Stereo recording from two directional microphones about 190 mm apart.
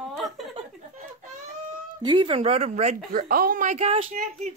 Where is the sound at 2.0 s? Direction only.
25° right (ahead or behind).